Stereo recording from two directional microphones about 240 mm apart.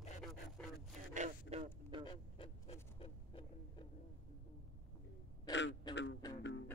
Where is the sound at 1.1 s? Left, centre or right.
Right.